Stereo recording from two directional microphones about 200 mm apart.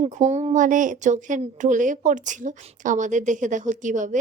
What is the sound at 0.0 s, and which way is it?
Speech, 35° right (ahead or behind).